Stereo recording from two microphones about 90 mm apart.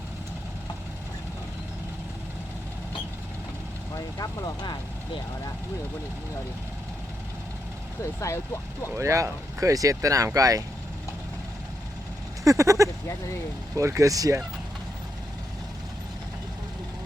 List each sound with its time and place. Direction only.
3.9 s speech: 45° left (ahead or behind)
9.0 s speech: 35° right (ahead or behind)
12.5 s speech: 35° right (ahead or behind)